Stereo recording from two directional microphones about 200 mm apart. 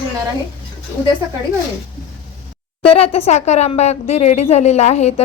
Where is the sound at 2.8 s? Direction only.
30° left (ahead or behind).